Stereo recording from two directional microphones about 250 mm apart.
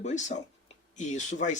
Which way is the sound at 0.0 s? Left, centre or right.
Left.